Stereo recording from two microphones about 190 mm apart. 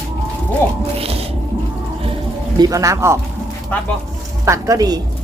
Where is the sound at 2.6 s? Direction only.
15° right (ahead or behind).